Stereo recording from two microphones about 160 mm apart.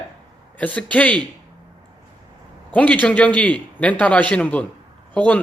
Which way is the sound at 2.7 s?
10° left (ahead or behind).